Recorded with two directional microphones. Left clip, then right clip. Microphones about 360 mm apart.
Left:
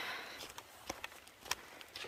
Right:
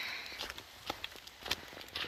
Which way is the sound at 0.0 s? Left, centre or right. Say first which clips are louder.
Right 2 dB; centre.